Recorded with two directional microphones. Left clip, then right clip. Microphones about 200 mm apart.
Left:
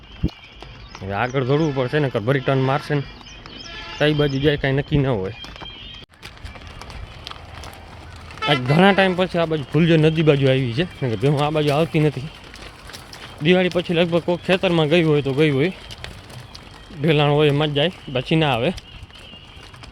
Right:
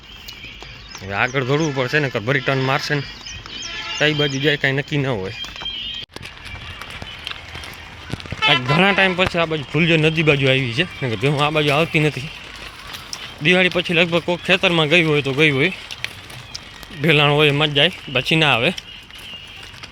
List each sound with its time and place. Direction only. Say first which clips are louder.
1.0 s speech: right 2 dB; 15° left (ahead or behind)
5.4 s clip-clop: right 8 dB; 50° left (ahead or behind)
8.6 s speech: even; 20° left (ahead or behind)
17.0 s speech: right 3 dB; 10° left (ahead or behind)